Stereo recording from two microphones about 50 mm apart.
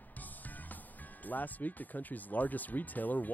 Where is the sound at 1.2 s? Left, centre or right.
Left.